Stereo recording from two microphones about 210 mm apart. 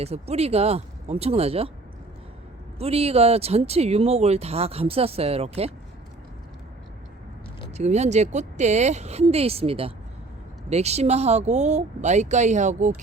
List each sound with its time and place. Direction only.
0.0 s speech: 30° right (ahead or behind)
2.7 s speech: 30° right (ahead or behind)
7.7 s speech: 30° right (ahead or behind)